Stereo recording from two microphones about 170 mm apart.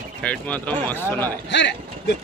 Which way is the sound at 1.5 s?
90° left.